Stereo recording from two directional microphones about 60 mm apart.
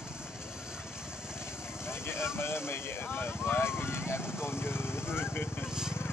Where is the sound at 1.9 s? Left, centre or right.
Left.